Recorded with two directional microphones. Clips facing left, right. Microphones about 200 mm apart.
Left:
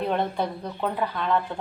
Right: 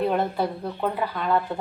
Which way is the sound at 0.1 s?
5° right (ahead or behind).